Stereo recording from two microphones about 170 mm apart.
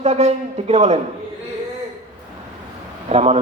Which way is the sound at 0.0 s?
40° right (ahead or behind).